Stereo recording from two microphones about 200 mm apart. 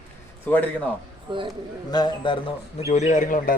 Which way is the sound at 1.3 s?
25° right (ahead or behind).